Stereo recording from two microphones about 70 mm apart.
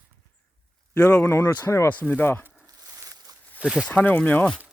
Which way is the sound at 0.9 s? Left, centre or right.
Centre.